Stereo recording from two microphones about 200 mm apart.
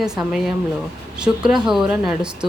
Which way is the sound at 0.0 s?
Centre (ahead or behind).